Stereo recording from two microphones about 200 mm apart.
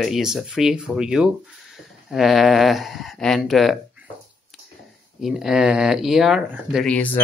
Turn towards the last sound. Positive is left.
turn(degrees=5)  # may be behind; listen again after turning